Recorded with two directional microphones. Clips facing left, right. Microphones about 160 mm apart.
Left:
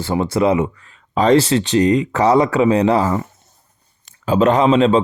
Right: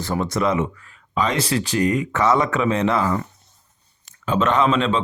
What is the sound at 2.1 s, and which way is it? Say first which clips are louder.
Speech: left 5 dB; 35° left (ahead or behind).